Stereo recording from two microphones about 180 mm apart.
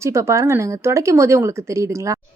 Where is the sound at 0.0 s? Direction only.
15° right (ahead or behind).